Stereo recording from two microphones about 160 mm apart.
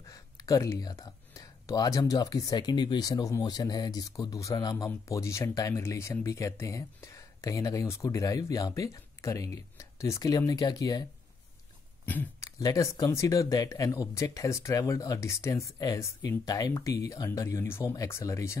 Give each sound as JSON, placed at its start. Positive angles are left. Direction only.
{"t": 0.1, "sound": "speech", "side_deg": 20}
{"t": 12.1, "sound": "speech", "side_deg": 15}